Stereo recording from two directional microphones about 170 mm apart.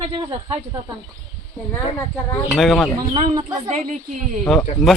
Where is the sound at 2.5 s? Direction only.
Centre (ahead or behind).